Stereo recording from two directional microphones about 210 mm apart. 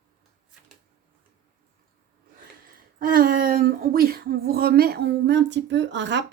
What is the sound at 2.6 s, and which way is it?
Speech, 40° right (ahead or behind).